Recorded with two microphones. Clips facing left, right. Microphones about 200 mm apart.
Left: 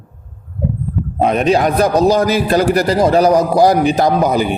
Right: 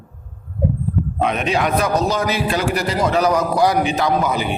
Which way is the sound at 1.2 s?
40° left (ahead or behind).